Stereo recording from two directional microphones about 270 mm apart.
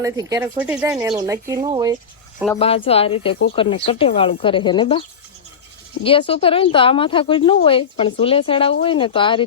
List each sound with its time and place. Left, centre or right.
0.0 s speech: centre
1.1 s speech: centre
2.6 s speech: left